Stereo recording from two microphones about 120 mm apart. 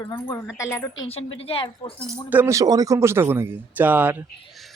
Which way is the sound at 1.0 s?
55° left (ahead or behind).